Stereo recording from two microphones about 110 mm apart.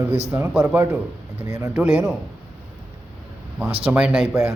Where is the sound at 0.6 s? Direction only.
20° right (ahead or behind).